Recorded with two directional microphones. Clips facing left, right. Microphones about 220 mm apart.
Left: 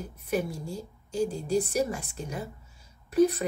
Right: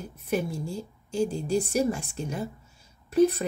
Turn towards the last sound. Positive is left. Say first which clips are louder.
# right 1 dB
turn(degrees=-25)  # may be behind; listen again after turning